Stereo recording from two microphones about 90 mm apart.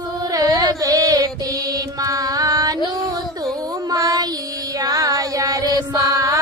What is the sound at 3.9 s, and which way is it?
Child singing, 45° right (ahead or behind).